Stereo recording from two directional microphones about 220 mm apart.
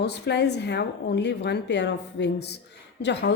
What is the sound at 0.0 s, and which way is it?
Speech, 50° left (ahead or behind).